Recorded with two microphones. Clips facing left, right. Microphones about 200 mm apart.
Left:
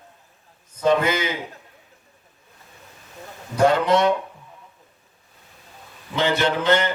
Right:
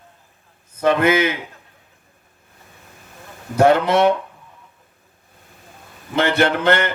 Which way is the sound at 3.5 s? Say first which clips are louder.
Right 3 dB; 60° right (ahead or behind).